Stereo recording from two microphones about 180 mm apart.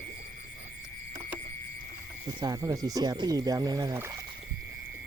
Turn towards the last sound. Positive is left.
turn(degrees=-15)  # may be behind; listen again after turning